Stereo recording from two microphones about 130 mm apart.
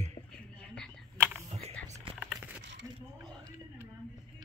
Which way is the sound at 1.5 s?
55° right (ahead or behind).